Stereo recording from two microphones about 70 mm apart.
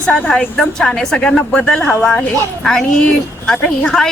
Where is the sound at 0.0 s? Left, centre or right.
Centre.